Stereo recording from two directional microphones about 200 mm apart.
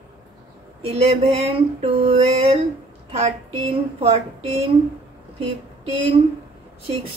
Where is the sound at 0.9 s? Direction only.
30° right (ahead or behind).